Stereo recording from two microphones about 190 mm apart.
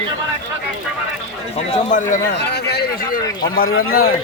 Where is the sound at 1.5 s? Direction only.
40° left (ahead or behind).